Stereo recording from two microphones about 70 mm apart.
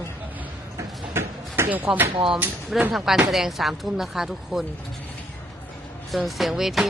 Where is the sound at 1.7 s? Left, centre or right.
Centre.